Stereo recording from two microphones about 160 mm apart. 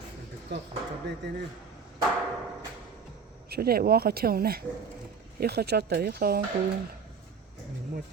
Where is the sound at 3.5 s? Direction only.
75° right (ahead or behind).